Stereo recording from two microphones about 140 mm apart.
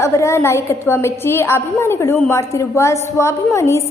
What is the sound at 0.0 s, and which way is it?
A woman's voice, 20° left (ahead or behind).